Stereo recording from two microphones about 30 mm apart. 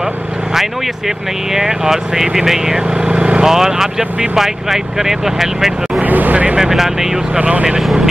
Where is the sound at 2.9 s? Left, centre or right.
Right.